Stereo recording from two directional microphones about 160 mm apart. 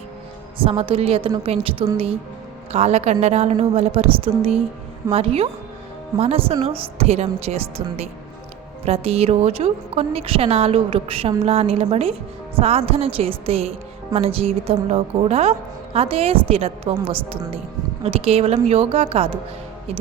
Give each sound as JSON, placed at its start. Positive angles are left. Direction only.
{"t": 0.6, "sound": "speech", "side_deg": -35}